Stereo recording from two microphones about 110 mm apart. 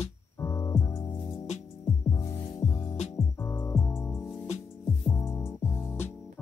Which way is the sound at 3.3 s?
20° left (ahead or behind).